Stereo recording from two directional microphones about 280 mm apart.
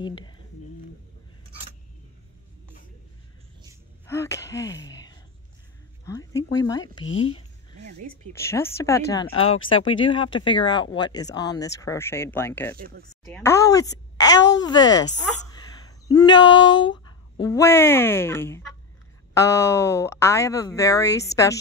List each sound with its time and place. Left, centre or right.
0.0 s speech: centre
4.1 s gasp: centre
6.0 s a sound: centre
7.2 s speech: centre
7.8 s speech: right
8.3 s speech: centre
9.5 s speech: left
10.0 s speech: centre
12.7 s speech: right
13.3 s speech: centre
16.4 s speech: left
17.4 s speech: centre